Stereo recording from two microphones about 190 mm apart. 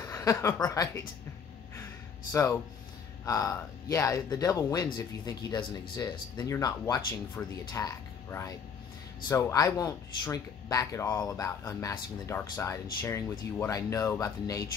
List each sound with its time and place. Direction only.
0.0 s speech: 15° left (ahead or behind)
2.3 s speech: 15° left (ahead or behind)